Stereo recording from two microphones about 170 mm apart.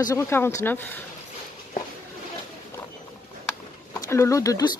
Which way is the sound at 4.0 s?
15° left (ahead or behind).